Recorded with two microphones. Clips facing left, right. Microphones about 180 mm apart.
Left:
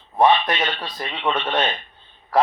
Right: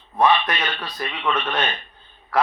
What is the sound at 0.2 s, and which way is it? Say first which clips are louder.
A man's voice: left 2 dB; 30° left (ahead or behind).